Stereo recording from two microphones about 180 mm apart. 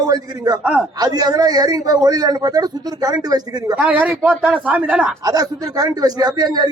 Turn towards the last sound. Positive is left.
turn(degrees=-20)  # may be behind; listen again after turning